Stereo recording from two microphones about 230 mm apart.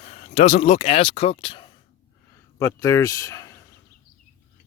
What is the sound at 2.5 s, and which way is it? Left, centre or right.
Speech, centre.